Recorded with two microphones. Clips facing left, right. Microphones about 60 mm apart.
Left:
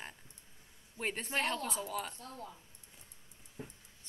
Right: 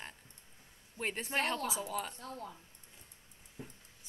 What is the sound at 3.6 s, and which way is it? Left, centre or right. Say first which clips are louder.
Dog: left 1 dB; left.